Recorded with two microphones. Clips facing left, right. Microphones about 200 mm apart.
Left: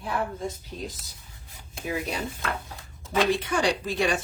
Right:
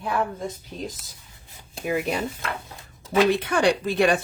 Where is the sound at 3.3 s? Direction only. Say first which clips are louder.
Right 4 dB; 60° right (ahead or behind).